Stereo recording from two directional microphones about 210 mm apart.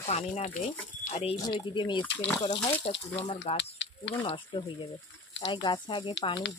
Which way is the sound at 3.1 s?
25° left (ahead or behind).